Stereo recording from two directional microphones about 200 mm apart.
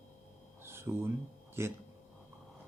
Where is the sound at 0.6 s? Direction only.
10° right (ahead or behind).